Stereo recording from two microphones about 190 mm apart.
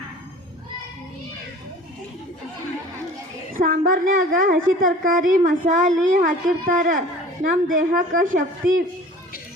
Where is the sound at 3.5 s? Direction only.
45° right (ahead or behind).